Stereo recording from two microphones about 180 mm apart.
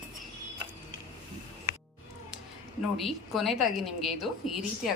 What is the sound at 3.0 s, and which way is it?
Speech, centre (ahead or behind).